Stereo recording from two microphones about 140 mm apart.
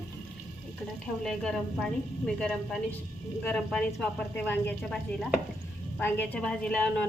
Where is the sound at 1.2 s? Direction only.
5° left (ahead or behind).